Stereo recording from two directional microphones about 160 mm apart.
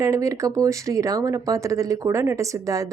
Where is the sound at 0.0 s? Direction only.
20° right (ahead or behind).